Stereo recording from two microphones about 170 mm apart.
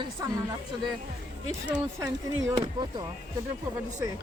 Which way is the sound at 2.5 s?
25° right (ahead or behind).